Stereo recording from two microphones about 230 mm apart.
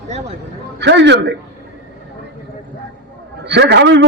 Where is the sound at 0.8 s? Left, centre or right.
Right.